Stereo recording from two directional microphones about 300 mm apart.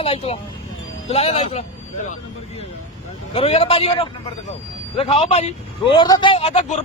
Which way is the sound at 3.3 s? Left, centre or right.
Centre.